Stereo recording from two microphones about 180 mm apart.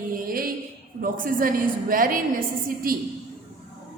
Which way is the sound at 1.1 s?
50° right (ahead or behind).